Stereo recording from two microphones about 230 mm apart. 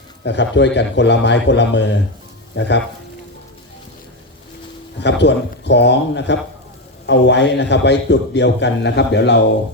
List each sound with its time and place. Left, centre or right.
0.3 s a man's voice: left
4.9 s a man's voice: left